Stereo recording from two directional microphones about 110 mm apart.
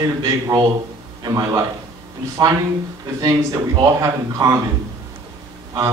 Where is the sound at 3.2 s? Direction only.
40° right (ahead or behind).